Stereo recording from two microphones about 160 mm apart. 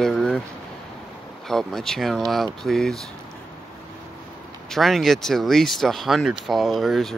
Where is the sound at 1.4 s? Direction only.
5° left (ahead or behind).